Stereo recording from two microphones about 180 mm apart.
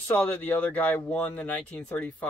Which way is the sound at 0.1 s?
10° left (ahead or behind).